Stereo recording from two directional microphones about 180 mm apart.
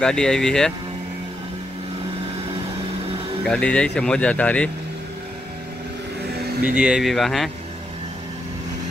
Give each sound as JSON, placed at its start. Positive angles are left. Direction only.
{"t": 0.0, "sound": "speech", "side_deg": 5}
{"t": 3.4, "sound": "speech", "side_deg": 5}
{"t": 6.6, "sound": "speech", "side_deg": -5}